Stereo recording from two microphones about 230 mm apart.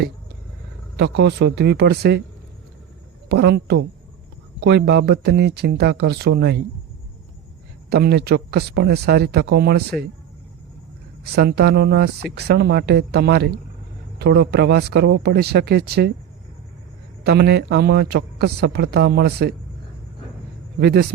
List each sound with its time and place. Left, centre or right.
0.9 s a man's voice: right
3.2 s a man's voice: right
7.9 s a man's voice: right
11.2 s a man's voice: right
17.2 s a man's voice: right
20.7 s a man's voice: right